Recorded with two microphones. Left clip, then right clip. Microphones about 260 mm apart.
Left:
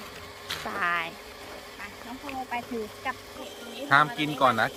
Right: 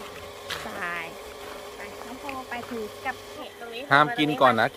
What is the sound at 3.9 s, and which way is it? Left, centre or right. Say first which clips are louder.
Speech: right 2 dB; right.